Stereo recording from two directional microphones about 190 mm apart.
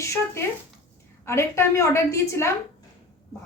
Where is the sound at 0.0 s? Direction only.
15° left (ahead or behind).